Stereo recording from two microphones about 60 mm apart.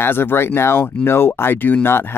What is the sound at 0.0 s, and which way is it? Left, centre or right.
Speech, left.